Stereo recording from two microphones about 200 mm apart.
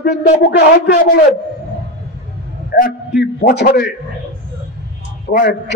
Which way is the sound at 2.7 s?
50° left (ahead or behind).